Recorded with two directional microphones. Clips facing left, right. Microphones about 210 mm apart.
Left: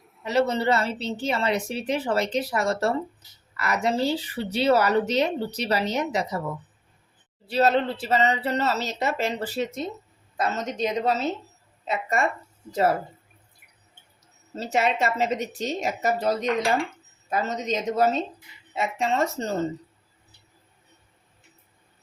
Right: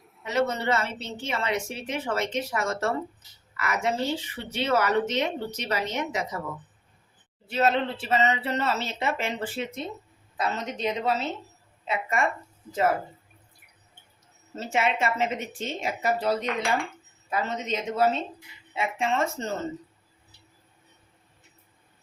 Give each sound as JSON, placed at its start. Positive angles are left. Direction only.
{"t": 0.3, "sound": "speech", "side_deg": 35}
{"t": 7.4, "sound": "a woman's voice", "side_deg": 35}
{"t": 14.5, "sound": "speech", "side_deg": 35}